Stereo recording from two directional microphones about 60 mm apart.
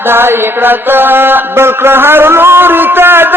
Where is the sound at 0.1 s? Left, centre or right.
Right.